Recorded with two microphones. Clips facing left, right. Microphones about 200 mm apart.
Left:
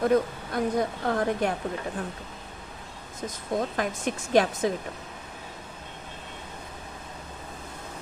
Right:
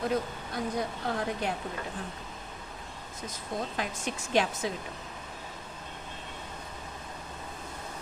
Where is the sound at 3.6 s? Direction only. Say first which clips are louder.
Left 5 dB; 50° left (ahead or behind).